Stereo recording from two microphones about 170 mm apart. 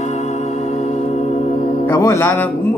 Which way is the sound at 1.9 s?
15° left (ahead or behind).